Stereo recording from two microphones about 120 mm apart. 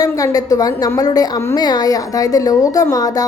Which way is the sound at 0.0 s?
30° left (ahead or behind).